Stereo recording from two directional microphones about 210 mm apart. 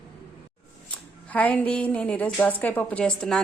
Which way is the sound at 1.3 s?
5° left (ahead or behind).